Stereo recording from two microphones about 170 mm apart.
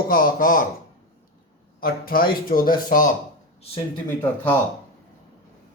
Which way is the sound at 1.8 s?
60° left (ahead or behind).